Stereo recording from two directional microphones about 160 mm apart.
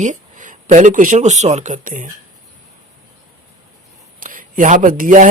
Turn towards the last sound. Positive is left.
turn(degrees=-50)  # may be behind; listen again after turning